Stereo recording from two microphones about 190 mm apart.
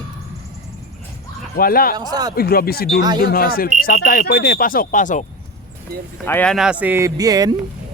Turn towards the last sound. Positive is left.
turn(degrees=-20)  # may be behind; listen again after turning